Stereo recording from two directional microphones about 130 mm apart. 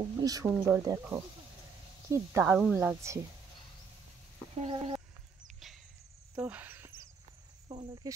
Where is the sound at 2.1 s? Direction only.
20° right (ahead or behind).